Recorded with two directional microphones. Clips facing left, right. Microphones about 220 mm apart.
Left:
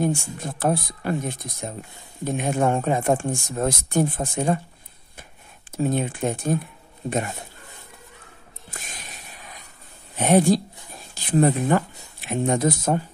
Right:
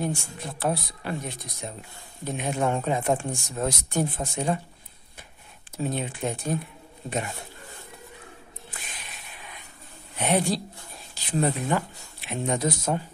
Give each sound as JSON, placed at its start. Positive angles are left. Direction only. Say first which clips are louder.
{"t": 0.0, "sound": "speech", "louder": "left 6 dB", "side_deg": 50}
{"t": 5.8, "sound": "speech", "louder": "left 6 dB", "side_deg": 50}
{"t": 8.6, "sound": "a sound", "louder": "left 4 dB", "side_deg": 45}
{"t": 10.1, "sound": "speech", "louder": "left 7 dB", "side_deg": 45}